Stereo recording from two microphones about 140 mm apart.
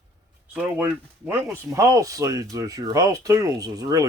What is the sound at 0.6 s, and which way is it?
Speech, 10° right (ahead or behind).